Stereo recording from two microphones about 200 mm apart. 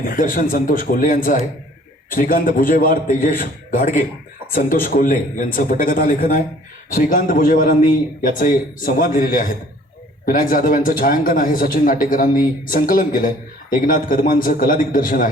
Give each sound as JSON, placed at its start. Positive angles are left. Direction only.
{"t": 0.0, "sound": "a man's voice", "side_deg": 45}